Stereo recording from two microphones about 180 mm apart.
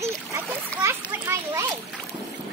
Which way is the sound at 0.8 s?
15° right (ahead or behind).